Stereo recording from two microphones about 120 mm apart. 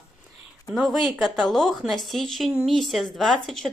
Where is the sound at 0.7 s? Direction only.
5° right (ahead or behind).